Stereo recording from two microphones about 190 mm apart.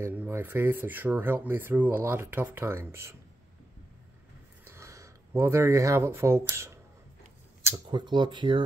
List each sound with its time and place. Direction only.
0.0 s speech: 10° right (ahead or behind)
4.6 s speech: 15° right (ahead or behind)